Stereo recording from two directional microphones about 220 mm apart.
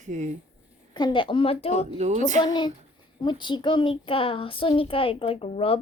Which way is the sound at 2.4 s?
20° left (ahead or behind).